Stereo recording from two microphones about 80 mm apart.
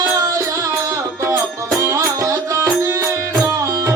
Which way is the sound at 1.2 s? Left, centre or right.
Right.